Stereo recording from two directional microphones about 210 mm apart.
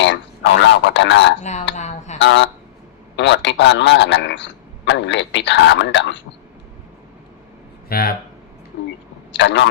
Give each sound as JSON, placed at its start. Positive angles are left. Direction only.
{"t": 0.6, "sound": "speech", "side_deg": 55}
{"t": 1.4, "sound": "speech", "side_deg": 35}
{"t": 1.7, "sound": "a sound", "side_deg": 35}
{"t": 2.1, "sound": "a man's voice", "side_deg": 55}
{"t": 7.9, "sound": "speech", "side_deg": 45}
{"t": 9.3, "sound": "a man's voice", "side_deg": 60}